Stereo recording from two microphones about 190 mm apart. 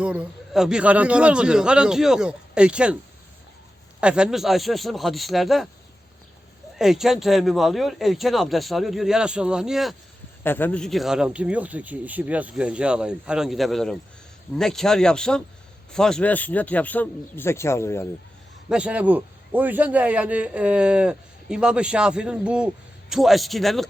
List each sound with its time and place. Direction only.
0.0 s a man's voice: 5° right (ahead or behind)
4.0 s a man's voice: 5° right (ahead or behind)
6.7 s a man's voice: centre (ahead or behind)
10.4 s a man's voice: 10° left (ahead or behind)
18.7 s a man's voice: 5° right (ahead or behind)